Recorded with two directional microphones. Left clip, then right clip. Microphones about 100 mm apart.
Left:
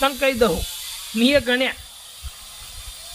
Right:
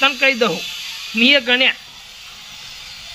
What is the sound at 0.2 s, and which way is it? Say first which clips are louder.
Speech: right 3 dB; 30° left (ahead or behind).